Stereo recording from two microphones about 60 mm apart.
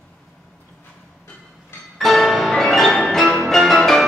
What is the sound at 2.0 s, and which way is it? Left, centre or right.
Music, centre.